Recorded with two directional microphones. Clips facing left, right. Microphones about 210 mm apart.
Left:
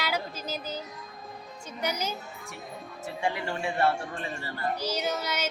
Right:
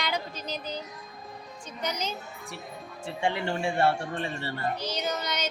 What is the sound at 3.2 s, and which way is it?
Speech, 30° right (ahead or behind).